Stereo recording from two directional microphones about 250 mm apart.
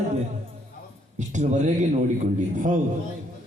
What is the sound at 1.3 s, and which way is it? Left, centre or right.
Speech, right.